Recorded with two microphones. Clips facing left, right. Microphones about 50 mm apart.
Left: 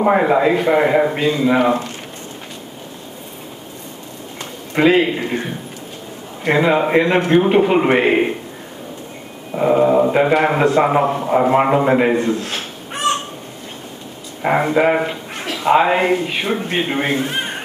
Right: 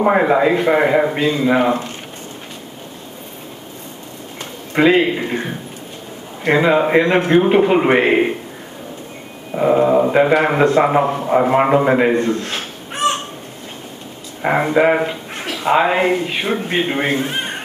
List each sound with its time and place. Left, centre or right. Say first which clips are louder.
0.0 s a man's voice: even; centre
4.7 s a man's voice: right 1 dB; centre
9.5 s a man's voice: even; centre
14.4 s a man's voice: right 1 dB; centre